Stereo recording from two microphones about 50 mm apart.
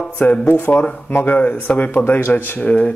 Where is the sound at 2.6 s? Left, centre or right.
Left.